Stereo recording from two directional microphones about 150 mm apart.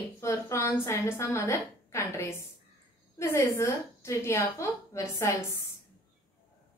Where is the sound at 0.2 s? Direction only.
20° left (ahead or behind).